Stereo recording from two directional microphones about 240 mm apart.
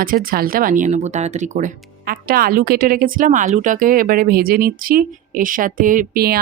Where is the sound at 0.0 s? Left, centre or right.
Right.